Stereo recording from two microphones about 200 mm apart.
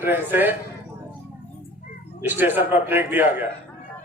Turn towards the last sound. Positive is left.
turn(degrees=-10)  # may be behind; listen again after turning